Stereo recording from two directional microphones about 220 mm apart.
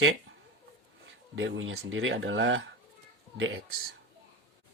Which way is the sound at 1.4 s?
60° right (ahead or behind).